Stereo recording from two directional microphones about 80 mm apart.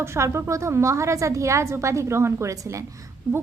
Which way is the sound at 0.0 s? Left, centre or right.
Right.